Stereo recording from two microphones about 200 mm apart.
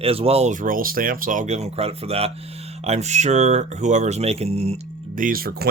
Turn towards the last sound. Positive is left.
turn(degrees=-45)  # may be behind; listen again after turning